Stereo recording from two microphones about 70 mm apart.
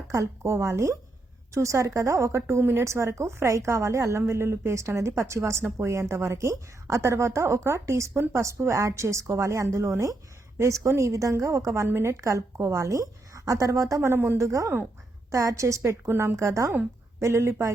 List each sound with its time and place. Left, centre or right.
0.1 s a woman's voice: right
12.2 s speech: right